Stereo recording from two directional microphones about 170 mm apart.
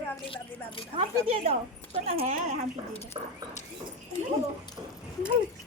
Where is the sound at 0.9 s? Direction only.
35° right (ahead or behind).